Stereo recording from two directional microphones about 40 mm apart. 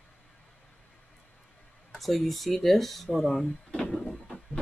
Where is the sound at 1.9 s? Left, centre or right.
Centre.